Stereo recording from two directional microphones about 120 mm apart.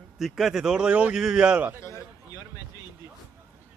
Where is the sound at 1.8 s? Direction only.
25° left (ahead or behind).